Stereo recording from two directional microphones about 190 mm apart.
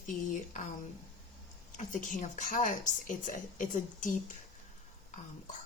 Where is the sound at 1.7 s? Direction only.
40° left (ahead or behind).